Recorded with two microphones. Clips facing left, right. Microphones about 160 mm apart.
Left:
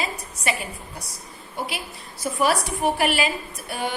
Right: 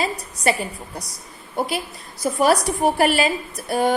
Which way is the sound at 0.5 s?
40° right (ahead or behind).